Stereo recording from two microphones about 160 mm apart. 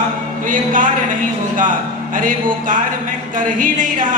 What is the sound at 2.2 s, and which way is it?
Speech, 60° right (ahead or behind).